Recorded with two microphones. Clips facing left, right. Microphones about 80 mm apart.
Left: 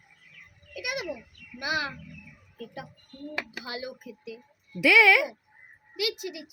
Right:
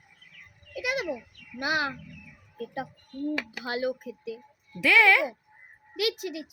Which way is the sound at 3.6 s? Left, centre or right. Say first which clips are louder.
Right 7 dB; right.